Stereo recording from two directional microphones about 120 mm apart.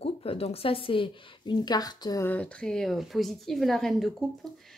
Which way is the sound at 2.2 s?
10° left (ahead or behind).